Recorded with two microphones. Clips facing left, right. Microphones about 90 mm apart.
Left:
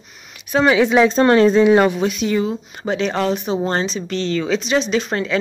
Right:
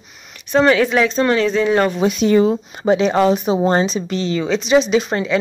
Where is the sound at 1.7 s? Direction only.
10° left (ahead or behind).